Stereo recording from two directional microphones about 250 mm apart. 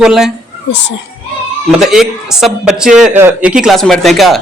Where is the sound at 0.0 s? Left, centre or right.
Centre.